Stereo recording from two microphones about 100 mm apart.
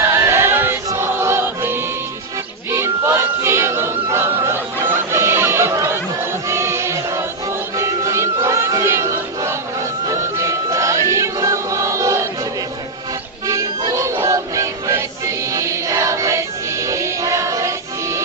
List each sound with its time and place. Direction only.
0.0 s music: 25° right (ahead or behind)
2.7 s choir: 25° right (ahead or behind)
7.8 s music: 30° right (ahead or behind)
13.5 s music: 35° right (ahead or behind)